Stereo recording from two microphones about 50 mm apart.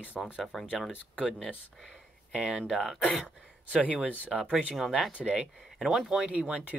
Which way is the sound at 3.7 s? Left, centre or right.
Right.